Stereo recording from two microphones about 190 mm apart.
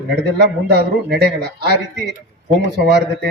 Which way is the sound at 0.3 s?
60° right (ahead or behind).